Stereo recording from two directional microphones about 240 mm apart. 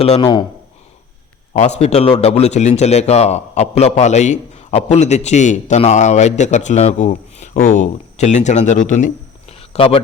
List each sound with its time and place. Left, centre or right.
0.0 s a man's voice: left
1.5 s a man's voice: left